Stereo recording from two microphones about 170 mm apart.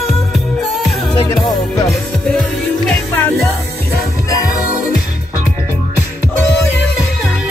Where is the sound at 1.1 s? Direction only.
25° left (ahead or behind).